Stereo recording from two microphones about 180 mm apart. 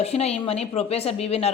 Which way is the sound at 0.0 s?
35° left (ahead or behind).